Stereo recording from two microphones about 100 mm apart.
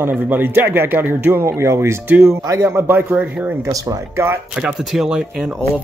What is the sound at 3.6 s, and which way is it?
Speech, 35° right (ahead or behind).